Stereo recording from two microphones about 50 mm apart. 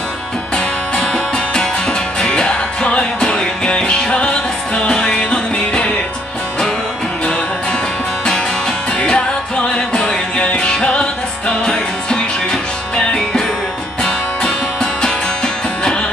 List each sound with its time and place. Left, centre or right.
0.9 s music: centre
9.0 s music: centre